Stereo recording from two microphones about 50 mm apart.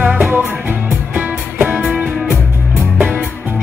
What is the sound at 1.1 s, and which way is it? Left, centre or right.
Music, right.